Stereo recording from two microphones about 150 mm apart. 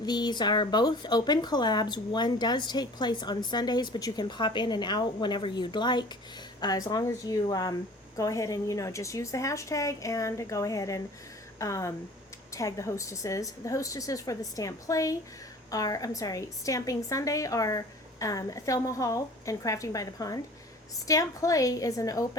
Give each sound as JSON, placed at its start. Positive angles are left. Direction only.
{"t": 0.0, "sound": "speech", "side_deg": 30}